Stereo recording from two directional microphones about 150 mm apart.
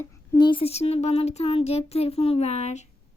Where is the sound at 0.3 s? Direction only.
30° left (ahead or behind); by 2.8 s 50° left (ahead or behind).